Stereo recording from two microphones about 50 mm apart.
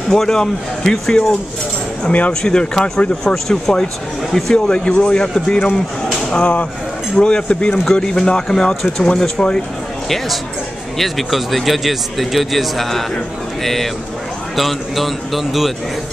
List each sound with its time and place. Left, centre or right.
0.1 s speech: centre
2.4 s speech: centre
3.4 s speech: centre
4.6 s speech: centre
6.3 s a man's voice: left; by 15.7 s centre